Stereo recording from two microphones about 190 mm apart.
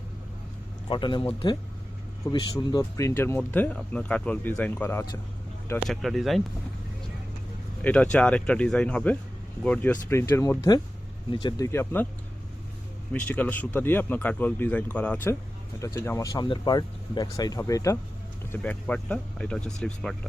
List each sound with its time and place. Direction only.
0.9 s speech: 25° left (ahead or behind)
5.9 s speech: centre (ahead or behind)
7.9 s speech: 5° left (ahead or behind)
13.1 s speech: 10° left (ahead or behind)